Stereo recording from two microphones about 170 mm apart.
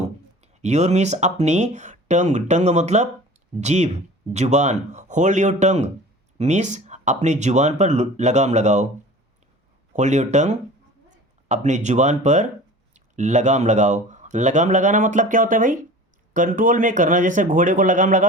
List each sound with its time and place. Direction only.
0.6 s speech: 40° right (ahead or behind)
9.9 s speech: 45° right (ahead or behind)